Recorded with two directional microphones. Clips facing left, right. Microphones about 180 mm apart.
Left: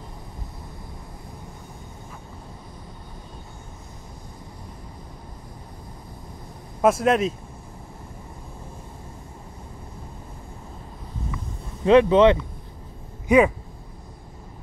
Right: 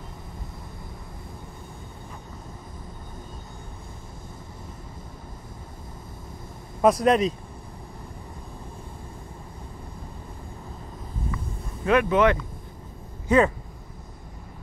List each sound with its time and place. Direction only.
6.8 s speech: 5° left (ahead or behind)
11.8 s speech: 25° left (ahead or behind)
13.3 s speech: 15° left (ahead or behind)